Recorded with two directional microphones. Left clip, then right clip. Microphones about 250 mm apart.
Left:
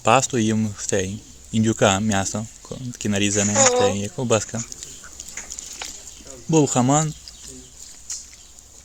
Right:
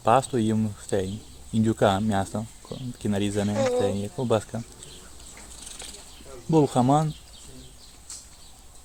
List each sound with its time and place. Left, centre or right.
0.0 s speech: left
3.5 s speech: centre
3.8 s speech: left
6.5 s speech: left